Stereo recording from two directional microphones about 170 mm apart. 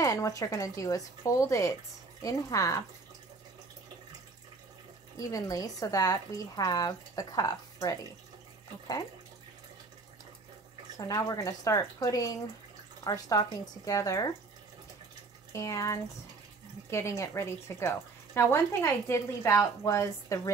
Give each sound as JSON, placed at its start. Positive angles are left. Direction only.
{"t": 0.0, "sound": "speech", "side_deg": 20}
{"t": 5.2, "sound": "speech", "side_deg": 20}
{"t": 11.0, "sound": "speech", "side_deg": 20}
{"t": 15.5, "sound": "speech", "side_deg": 20}